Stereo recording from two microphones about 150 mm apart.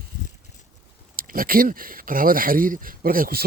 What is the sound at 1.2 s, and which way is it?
Speech, 70° right (ahead or behind).